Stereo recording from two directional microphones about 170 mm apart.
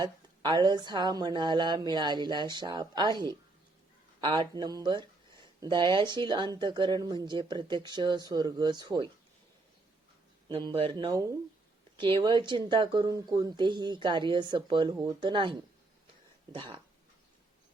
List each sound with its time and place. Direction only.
0.0 s speech: 25° right (ahead or behind)
10.5 s speech: 30° right (ahead or behind)